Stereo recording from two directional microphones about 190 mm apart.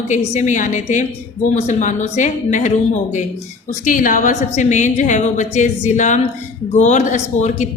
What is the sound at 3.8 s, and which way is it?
A woman's voice, 45° left (ahead or behind).